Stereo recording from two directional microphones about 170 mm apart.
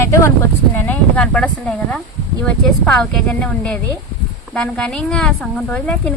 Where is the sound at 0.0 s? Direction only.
15° left (ahead or behind).